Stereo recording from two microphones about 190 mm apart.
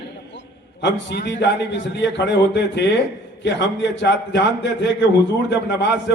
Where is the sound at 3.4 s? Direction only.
65° left (ahead or behind).